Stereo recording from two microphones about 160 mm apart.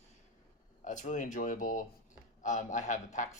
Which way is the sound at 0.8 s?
50° left (ahead or behind).